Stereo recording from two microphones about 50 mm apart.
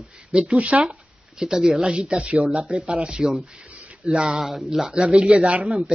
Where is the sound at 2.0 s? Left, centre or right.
Right.